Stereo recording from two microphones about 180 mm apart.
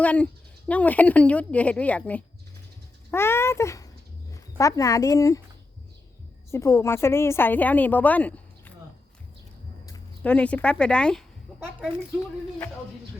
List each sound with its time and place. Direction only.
0.0 s a woman's voice: 5° left (ahead or behind)
6.5 s a woman's voice: 15° left (ahead or behind)
10.2 s a woman's voice: 5° left (ahead or behind)